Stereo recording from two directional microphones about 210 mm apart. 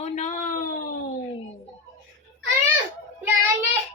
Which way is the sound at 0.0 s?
35° left (ahead or behind).